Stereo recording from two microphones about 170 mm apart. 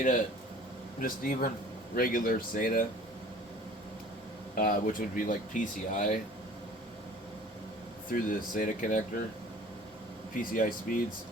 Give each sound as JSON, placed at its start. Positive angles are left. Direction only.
{"t": 0.9, "sound": "speech", "side_deg": 55}
{"t": 4.5, "sound": "speech", "side_deg": 55}
{"t": 8.1, "sound": "speech", "side_deg": 55}
{"t": 10.3, "sound": "speech", "side_deg": 55}